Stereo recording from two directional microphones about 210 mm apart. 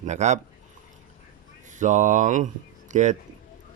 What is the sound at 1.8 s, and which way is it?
Mantra, 35° right (ahead or behind).